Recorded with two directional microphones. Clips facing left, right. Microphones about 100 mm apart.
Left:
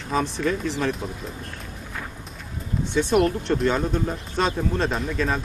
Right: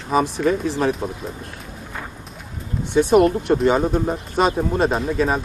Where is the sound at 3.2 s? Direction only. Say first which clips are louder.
Right 5 dB; 5° right (ahead or behind).